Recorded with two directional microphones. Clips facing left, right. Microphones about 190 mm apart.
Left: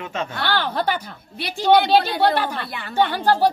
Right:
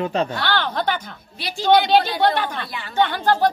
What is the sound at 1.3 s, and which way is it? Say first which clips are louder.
Speech: left 2 dB; 55° left (ahead or behind).